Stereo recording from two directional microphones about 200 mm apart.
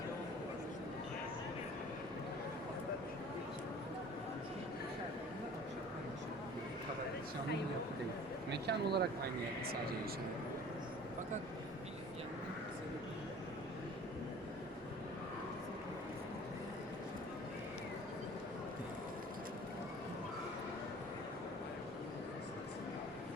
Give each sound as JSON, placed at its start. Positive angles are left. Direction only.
{"t": 8.4, "sound": "speech", "side_deg": -55}